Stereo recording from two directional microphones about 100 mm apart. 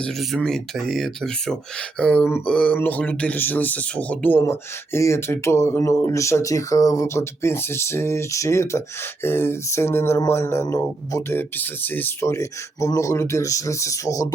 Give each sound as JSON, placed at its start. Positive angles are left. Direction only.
{"t": 0.0, "sound": "speech", "side_deg": 0}
{"t": 2.0, "sound": "a sound", "side_deg": 10}
{"t": 2.7, "sound": "speech", "side_deg": 15}
{"t": 11.3, "sound": "speech", "side_deg": 20}
{"t": 12.2, "sound": "speech", "side_deg": 30}